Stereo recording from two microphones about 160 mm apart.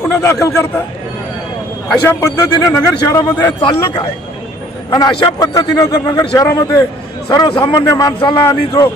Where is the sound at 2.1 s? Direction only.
20° left (ahead or behind).